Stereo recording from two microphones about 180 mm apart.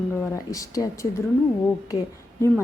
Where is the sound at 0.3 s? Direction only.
20° left (ahead or behind).